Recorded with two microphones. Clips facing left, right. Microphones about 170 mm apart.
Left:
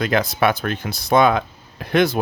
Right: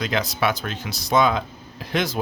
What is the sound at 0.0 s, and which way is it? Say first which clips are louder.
Speech: left 5 dB; 55° left (ahead or behind).